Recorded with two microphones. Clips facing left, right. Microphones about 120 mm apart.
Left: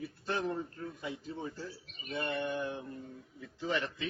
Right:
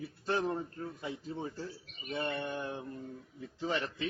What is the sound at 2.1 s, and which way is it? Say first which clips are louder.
Mantra: left 1 dB; 30° right (ahead or behind).